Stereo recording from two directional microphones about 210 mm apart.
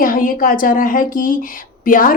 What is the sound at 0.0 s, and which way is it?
A woman's voice, 40° left (ahead or behind).